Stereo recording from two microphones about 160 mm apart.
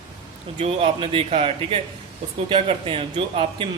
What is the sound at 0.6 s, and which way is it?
A man's voice, 35° right (ahead or behind).